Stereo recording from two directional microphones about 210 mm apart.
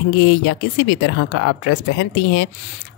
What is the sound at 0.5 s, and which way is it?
Speech, 65° left (ahead or behind).